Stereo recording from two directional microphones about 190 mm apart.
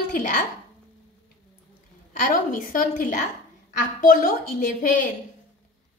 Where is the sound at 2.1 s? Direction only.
45° left (ahead or behind).